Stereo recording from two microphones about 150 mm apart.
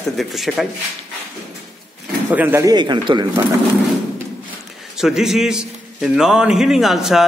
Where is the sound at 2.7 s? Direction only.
30° right (ahead or behind).